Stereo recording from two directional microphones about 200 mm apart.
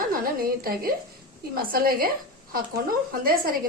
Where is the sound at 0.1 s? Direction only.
45° right (ahead or behind).